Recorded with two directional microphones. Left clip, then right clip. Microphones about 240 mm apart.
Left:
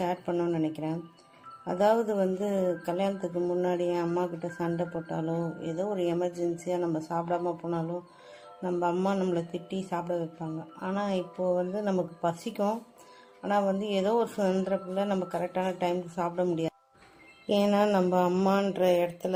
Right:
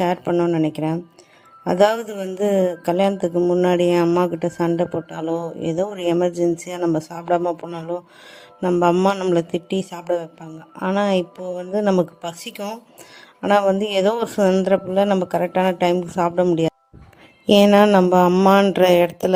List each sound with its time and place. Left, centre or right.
0.0 s speech: right
11.7 s mantra: right
13.4 s speech: right
17.4 s mantra: right